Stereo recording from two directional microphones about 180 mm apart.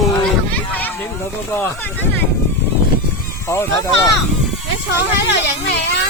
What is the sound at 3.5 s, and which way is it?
Speech, 15° left (ahead or behind).